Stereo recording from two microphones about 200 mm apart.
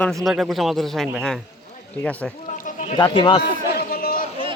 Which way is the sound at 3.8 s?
50° left (ahead or behind).